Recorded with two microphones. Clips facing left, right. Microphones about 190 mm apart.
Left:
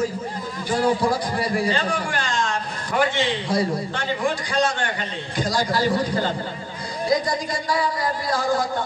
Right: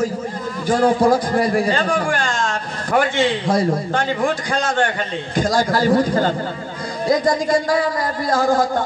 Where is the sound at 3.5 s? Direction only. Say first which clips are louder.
Right 5 dB; 50° right (ahead or behind).